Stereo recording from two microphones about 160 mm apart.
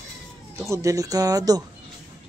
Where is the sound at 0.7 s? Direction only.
20° right (ahead or behind).